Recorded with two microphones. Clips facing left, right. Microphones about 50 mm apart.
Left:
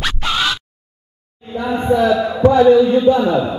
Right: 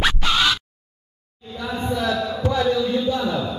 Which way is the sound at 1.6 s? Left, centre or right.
Left.